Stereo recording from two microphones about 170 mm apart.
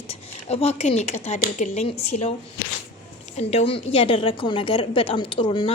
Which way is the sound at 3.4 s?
35° left (ahead or behind).